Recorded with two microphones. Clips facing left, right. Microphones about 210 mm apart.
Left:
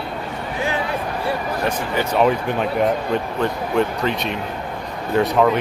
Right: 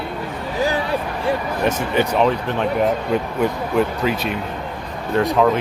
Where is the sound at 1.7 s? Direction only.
25° right (ahead or behind).